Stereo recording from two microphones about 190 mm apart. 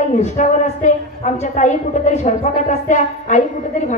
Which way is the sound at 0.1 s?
40° left (ahead or behind).